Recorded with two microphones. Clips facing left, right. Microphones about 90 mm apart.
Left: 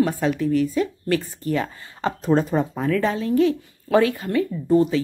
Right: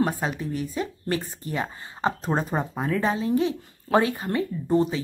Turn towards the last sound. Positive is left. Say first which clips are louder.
# left 4 dB
turn(degrees=-25)  # may be behind; listen again after turning